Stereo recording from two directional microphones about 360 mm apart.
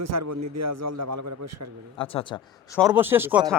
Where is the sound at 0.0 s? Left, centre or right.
Right.